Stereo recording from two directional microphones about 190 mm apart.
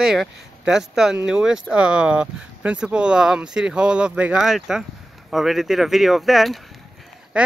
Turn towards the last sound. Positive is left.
turn(degrees=-5)  # may be behind; listen again after turning